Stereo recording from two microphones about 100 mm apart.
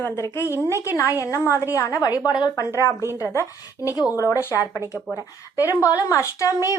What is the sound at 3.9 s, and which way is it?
Speech, 35° left (ahead or behind).